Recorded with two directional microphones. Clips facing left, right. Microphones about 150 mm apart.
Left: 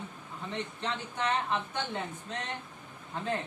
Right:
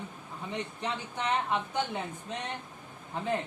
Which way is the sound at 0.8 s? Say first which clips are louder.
Even; 15° right (ahead or behind).